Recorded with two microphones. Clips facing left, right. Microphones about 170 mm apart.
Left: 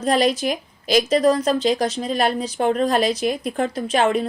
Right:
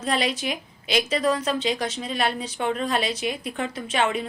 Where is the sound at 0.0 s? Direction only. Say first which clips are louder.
Left 7 dB; 40° left (ahead or behind).